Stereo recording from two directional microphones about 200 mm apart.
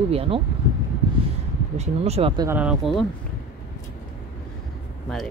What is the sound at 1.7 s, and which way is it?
Speech, 30° right (ahead or behind).